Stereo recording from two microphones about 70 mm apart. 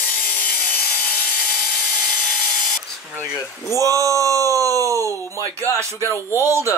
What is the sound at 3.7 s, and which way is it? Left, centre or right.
Speech, right.